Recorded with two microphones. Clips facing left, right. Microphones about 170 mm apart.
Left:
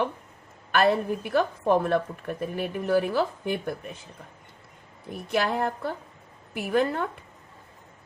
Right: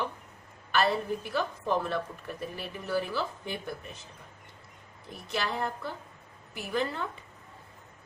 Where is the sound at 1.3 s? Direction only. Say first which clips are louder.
Left 8 dB; 55° left (ahead or behind).